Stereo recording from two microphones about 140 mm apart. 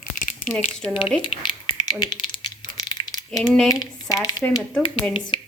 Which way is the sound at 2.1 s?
25° left (ahead or behind).